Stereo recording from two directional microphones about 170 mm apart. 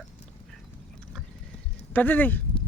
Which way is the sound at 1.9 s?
10° left (ahead or behind).